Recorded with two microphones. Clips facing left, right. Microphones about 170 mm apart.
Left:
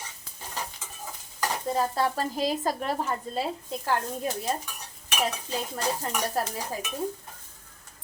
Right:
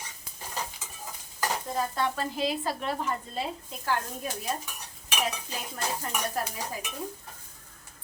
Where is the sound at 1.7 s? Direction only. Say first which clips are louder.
Left 5 dB; 35° left (ahead or behind).